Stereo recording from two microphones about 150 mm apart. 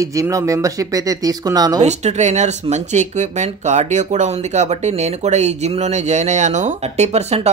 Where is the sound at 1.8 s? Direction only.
45° right (ahead or behind).